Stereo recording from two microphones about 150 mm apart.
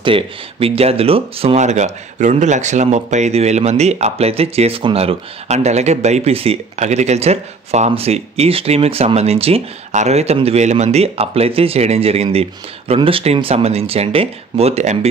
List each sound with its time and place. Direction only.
0.0 s speech: 35° right (ahead or behind)